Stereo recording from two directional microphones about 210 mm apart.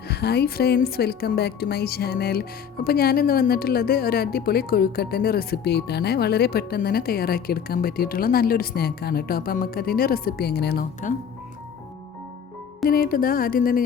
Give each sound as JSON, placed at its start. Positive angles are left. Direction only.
{"t": 0.1, "sound": "a woman's voice", "side_deg": 50}
{"t": 12.8, "sound": "a woman's voice", "side_deg": 45}